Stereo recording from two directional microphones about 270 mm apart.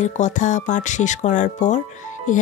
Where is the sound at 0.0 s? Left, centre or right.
Left.